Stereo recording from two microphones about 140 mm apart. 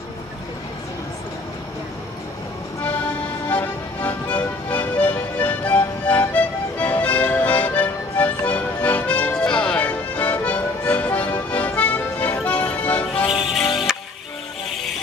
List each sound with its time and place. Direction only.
3.4 s music: 10° left (ahead or behind)
13.9 s music: 5° right (ahead or behind)